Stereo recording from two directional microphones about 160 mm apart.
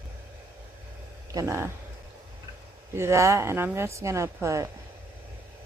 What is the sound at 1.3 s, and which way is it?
Speech, 15° right (ahead or behind).